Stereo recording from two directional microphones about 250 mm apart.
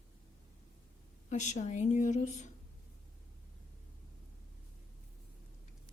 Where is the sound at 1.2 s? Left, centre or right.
Left.